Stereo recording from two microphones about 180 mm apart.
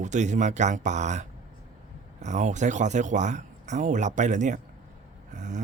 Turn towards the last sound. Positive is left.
turn(degrees=-45)  # may be behind; listen again after turning